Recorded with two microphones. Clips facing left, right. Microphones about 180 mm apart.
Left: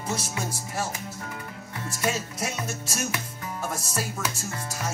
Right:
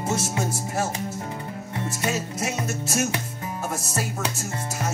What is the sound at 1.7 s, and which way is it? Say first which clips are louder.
Music: right 2 dB; 20° right (ahead or behind).